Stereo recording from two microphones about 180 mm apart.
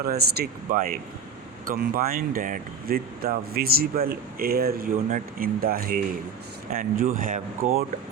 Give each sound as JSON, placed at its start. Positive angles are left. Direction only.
{"t": 0.0, "sound": "speech", "side_deg": -60}